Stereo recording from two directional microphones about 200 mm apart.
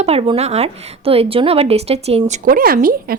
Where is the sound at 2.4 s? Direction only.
45° right (ahead or behind).